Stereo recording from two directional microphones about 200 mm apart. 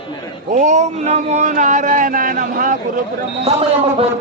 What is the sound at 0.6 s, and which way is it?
Speech, 35° right (ahead or behind).